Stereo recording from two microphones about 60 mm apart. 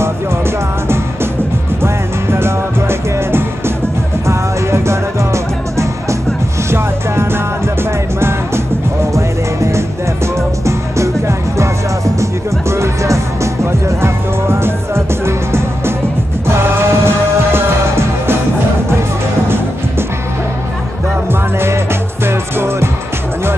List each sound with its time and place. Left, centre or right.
1.8 s music: right
9.1 s music: right
21.3 s music: right